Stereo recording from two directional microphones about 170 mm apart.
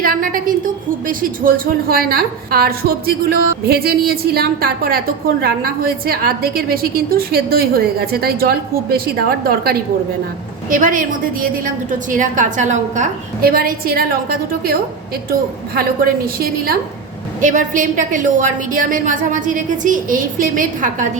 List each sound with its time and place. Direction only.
0.0 s a woman's voice: 55° right (ahead or behind)
10.7 s a woman's voice: 50° right (ahead or behind)
17.4 s a woman's voice: 50° right (ahead or behind)